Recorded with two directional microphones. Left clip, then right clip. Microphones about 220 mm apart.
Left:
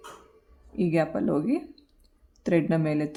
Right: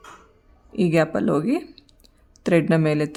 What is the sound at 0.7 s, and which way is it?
Speech, 35° right (ahead or behind).